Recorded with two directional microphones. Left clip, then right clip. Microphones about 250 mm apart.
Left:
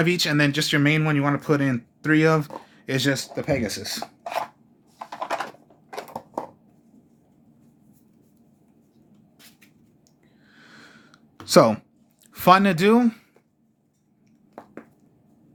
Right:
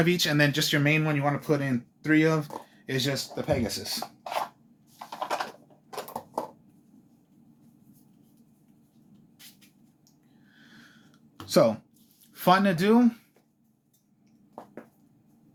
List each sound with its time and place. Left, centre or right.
0.0 s speech: left
4.9 s typing: left
10.5 s a sound: left
12.3 s speech: left